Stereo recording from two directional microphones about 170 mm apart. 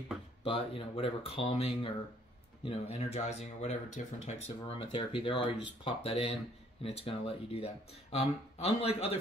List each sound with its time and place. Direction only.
0.4 s speech: 35° left (ahead or behind)